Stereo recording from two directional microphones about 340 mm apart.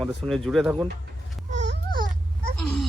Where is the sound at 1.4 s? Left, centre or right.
Right.